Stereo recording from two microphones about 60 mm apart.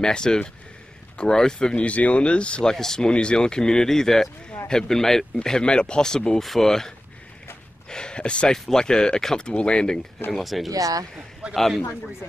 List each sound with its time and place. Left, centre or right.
0.0 s speech: centre
1.8 s speech: left; by 6.9 s centre
7.9 s speech: centre
10.3 s speech: centre
10.7 s speech: right
11.5 s speech: centre